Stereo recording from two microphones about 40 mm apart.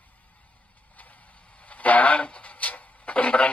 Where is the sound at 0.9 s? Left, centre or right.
Left.